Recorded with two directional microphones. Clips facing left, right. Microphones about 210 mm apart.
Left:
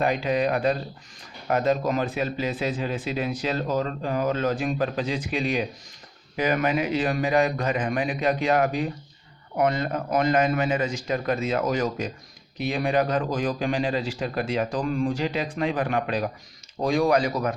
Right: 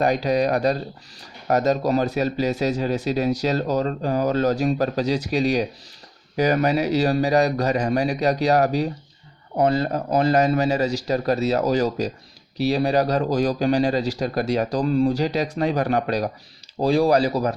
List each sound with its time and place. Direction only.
0.0 s speech: 40° right (ahead or behind)